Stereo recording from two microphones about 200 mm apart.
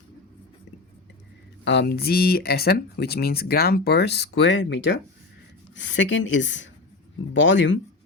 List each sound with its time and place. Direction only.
1.6 s a woman's voice: 60° left (ahead or behind)